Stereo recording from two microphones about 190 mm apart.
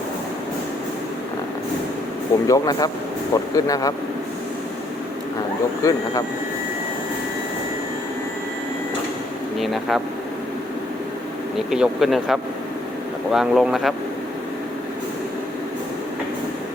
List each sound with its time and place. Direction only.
2.5 s speech: 20° left (ahead or behind)
5.8 s speech: 15° left (ahead or behind)
9.6 s speech: centre (ahead or behind)
11.7 s speech: centre (ahead or behind)